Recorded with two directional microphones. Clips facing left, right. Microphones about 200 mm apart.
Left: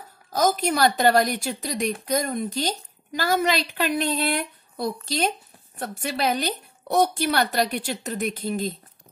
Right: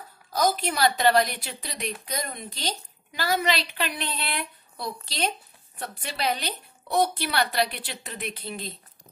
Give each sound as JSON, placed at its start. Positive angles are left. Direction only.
{"t": 0.3, "sound": "a woman's voice", "side_deg": 45}